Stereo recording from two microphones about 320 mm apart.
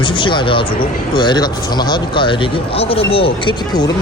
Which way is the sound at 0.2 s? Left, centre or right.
Centre.